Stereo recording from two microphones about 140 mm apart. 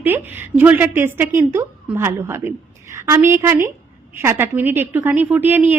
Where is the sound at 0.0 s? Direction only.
15° right (ahead or behind).